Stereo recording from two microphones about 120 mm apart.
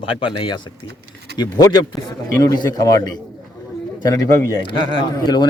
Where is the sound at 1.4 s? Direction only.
35° left (ahead or behind).